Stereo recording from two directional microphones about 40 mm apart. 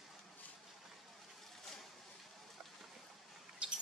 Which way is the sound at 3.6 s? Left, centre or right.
Right.